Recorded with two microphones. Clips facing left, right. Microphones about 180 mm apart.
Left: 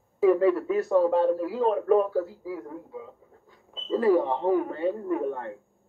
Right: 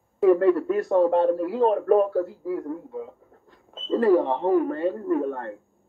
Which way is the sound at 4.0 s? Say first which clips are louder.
Right 2 dB; 60° right (ahead or behind).